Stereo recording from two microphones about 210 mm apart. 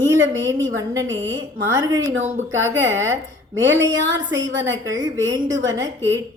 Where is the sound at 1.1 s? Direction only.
65° right (ahead or behind).